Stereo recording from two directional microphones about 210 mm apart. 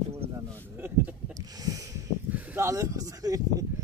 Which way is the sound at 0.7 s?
10° right (ahead or behind).